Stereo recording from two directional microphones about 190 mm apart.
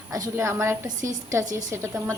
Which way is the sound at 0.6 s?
15° right (ahead or behind).